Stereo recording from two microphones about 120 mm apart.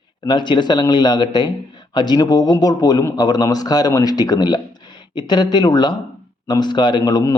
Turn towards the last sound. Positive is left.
turn(degrees=35)  # may be behind; listen again after turning